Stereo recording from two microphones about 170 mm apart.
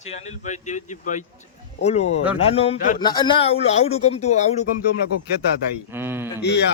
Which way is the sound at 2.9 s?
25° left (ahead or behind).